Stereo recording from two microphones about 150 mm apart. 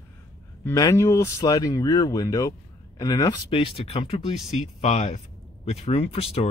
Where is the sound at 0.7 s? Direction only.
20° left (ahead or behind).